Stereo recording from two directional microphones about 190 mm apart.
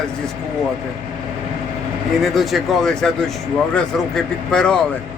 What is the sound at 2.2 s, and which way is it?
Speech, centre (ahead or behind).